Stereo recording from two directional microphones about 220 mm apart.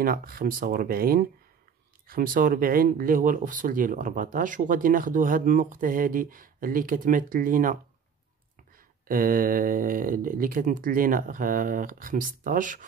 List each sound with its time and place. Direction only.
0.0 s speech: 40° right (ahead or behind)
9.0 s speech: 40° right (ahead or behind)